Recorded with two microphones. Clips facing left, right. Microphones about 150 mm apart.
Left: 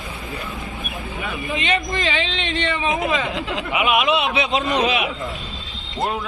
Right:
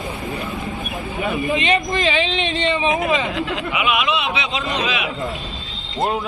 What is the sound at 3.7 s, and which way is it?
Speech, 45° left (ahead or behind).